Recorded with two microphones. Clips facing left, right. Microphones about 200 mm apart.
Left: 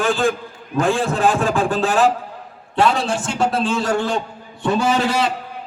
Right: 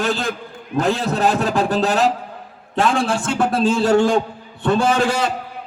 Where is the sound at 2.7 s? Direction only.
50° right (ahead or behind).